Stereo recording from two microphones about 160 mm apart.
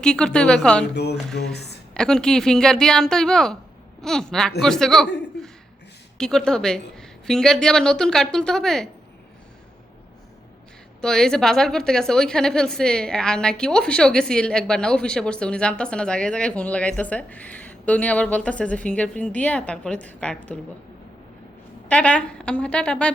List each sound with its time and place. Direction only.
0.0 s a woman's voice: 5° left (ahead or behind)
1.4 s a woman's voice: 80° left
1.9 s a woman's voice: 5° left (ahead or behind)
11.0 s a woman's voice: 5° left (ahead or behind)
21.8 s a woman's voice: 5° left (ahead or behind)